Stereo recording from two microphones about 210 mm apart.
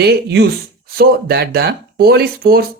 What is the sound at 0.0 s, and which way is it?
Speech, 50° right (ahead or behind).